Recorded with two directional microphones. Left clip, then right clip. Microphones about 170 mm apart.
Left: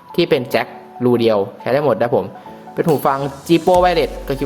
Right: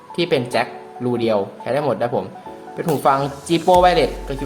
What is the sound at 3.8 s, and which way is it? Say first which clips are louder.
Speech: even; 35° left (ahead or behind).